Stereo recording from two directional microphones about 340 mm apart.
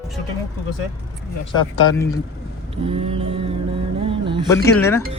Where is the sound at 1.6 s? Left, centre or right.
Centre.